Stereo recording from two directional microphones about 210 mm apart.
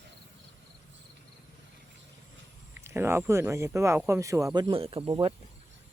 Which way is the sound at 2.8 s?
10° right (ahead or behind).